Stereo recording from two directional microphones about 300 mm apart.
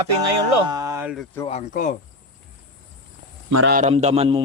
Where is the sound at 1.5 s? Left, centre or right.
Left.